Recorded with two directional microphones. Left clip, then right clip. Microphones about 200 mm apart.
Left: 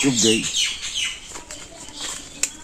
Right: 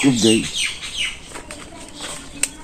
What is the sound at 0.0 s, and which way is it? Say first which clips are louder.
Speech: right 2 dB; 5° right (ahead or behind).